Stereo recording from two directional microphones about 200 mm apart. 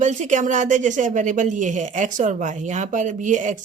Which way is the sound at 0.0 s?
35° right (ahead or behind).